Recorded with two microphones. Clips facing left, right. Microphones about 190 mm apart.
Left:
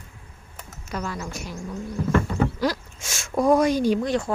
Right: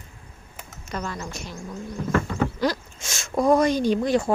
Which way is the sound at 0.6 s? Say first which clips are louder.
Left 1 dB; 5° left (ahead or behind).